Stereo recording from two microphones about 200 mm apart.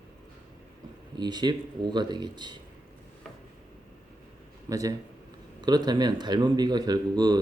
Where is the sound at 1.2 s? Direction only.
20° right (ahead or behind).